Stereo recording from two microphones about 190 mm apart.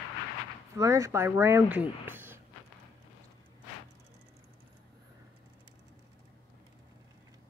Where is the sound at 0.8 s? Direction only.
15° right (ahead or behind).